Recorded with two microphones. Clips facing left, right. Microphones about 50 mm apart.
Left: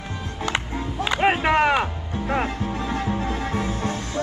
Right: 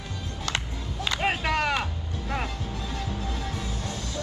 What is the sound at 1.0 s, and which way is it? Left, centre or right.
Music, left.